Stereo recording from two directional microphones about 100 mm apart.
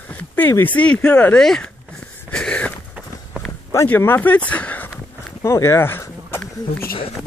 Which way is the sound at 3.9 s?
20° left (ahead or behind).